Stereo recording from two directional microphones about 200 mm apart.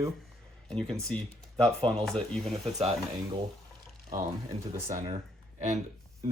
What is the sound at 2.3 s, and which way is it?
Speech, centre (ahead or behind).